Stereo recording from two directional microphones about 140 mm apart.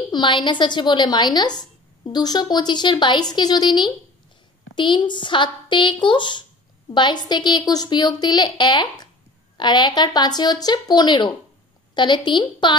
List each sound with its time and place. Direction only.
0.1 s a woman's voice: 35° left (ahead or behind)